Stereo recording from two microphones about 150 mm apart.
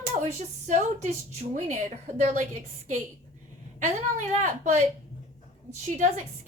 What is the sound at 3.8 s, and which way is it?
A woman's voice, 50° right (ahead or behind).